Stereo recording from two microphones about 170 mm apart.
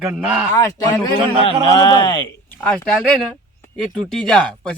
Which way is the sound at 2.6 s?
5° left (ahead or behind).